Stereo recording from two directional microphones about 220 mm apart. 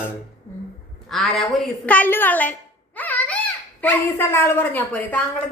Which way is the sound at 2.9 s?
5° left (ahead or behind).